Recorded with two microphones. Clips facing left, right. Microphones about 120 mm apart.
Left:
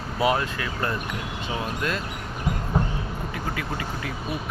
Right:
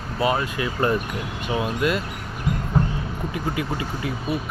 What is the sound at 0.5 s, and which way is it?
Speech, 20° right (ahead or behind).